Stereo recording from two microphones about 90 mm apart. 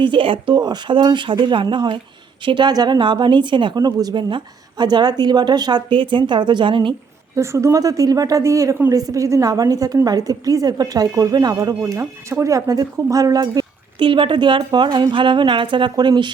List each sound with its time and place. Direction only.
0.0 s speech: 70° right (ahead or behind)
0.5 s a woman's voice: 50° right (ahead or behind)
1.0 s a woman's voice: 65° right (ahead or behind)
3.8 s a woman's voice: 45° right (ahead or behind); by 6.9 s 65° right (ahead or behind)
7.3 s a woman's voice: 35° right (ahead or behind)
11.8 s speech: 30° right (ahead or behind); by 14.1 s 50° right (ahead or behind)
14.1 s a woman's voice: 70° right (ahead or behind)